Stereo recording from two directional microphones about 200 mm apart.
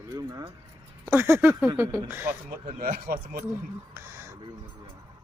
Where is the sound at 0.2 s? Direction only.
20° right (ahead or behind).